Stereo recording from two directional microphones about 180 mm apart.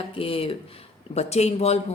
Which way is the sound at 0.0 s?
30° left (ahead or behind).